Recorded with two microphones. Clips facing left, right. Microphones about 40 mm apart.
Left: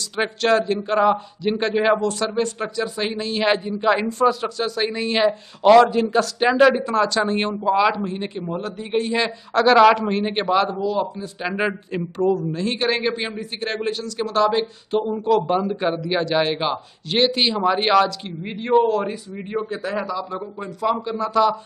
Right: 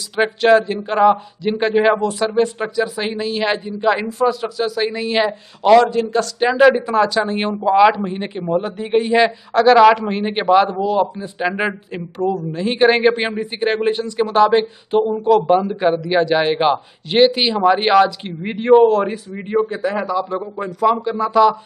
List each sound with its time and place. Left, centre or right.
0.1 s speech: centre
6.6 s speech: centre
9.5 s speech: centre
10.8 s speech: right
11.5 s speech: centre
12.5 s speech: centre
13.1 s speech: right; by 18.1 s centre
18.4 s speech: right
19.0 s speech: centre
19.7 s speech: centre